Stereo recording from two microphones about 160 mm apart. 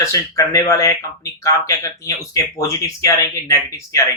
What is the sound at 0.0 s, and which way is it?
Speech, 20° left (ahead or behind).